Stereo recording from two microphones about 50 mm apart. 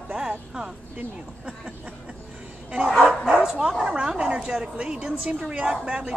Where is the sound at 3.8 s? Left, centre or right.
Centre.